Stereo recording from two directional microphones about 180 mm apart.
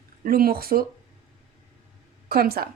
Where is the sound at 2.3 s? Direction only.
55° right (ahead or behind).